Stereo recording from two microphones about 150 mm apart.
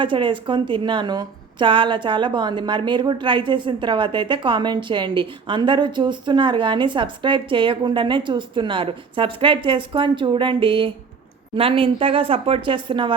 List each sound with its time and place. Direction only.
0.0 s a woman's voice: 35° right (ahead or behind)